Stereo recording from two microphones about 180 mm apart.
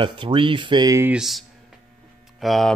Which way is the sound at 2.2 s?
Centre (ahead or behind).